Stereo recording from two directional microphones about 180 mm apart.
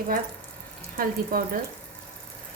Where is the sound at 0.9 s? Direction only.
50° right (ahead or behind).